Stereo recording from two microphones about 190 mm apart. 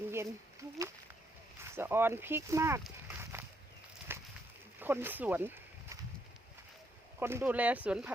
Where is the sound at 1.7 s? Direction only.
10° right (ahead or behind).